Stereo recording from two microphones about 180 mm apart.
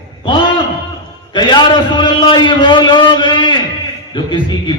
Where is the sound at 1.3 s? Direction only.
25° left (ahead or behind).